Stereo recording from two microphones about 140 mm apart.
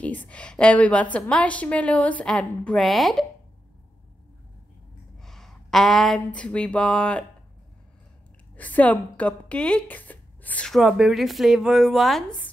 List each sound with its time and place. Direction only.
0.0 s a woman's voice: 10° left (ahead or behind)
5.2 s speech: centre (ahead or behind)
8.5 s speech: 10° left (ahead or behind)
10.8 s speech: 5° right (ahead or behind)